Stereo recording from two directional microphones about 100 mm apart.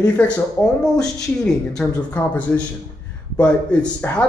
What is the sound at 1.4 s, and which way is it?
Speech, 5° left (ahead or behind).